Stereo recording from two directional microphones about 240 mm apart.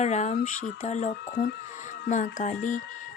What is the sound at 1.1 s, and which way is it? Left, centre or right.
Speech, left.